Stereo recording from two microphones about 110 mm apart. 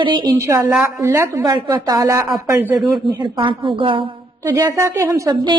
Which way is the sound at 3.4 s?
50° right (ahead or behind).